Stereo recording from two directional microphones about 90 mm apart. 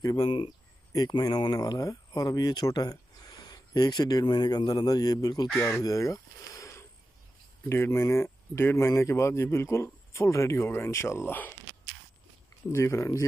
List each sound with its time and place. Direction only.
0.0 s speech: 45° left (ahead or behind)
5.6 s speech: 35° left (ahead or behind)
12.7 s speech: 30° left (ahead or behind)